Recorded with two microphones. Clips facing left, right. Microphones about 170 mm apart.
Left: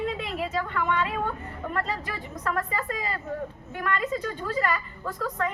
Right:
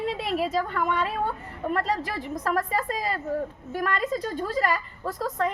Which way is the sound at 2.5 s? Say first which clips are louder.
Right 3 dB; 35° right (ahead or behind).